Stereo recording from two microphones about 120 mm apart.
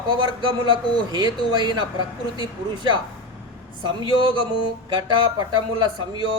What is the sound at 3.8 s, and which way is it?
Speech, 45° right (ahead or behind).